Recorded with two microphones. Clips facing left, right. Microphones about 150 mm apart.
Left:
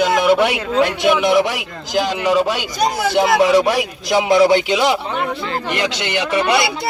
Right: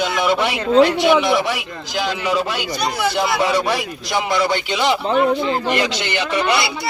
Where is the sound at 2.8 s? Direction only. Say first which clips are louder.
Left 5 dB; 45° left (ahead or behind).